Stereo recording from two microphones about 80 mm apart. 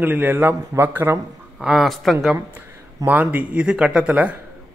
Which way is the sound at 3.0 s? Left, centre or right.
Right.